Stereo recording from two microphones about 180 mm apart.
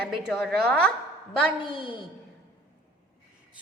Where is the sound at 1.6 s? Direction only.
30° left (ahead or behind).